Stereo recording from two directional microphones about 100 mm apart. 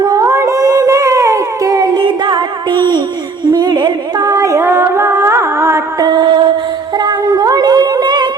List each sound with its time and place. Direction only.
0.0 s howl: 35° right (ahead or behind); by 3.0 s 50° right (ahead or behind)
3.5 s music: 40° right (ahead or behind)
6.0 s a sound: 50° right (ahead or behind)
6.9 s music: 45° right (ahead or behind)